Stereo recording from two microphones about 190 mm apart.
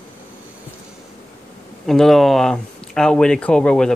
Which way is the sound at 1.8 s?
Centre (ahead or behind).